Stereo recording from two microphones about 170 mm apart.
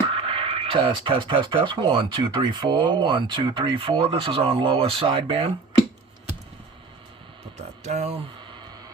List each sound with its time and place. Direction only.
0.1 s speech: 35° right (ahead or behind)
7.9 s speech: 40° right (ahead or behind)